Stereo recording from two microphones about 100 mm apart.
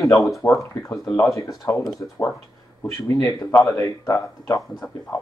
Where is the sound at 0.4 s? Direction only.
30° left (ahead or behind).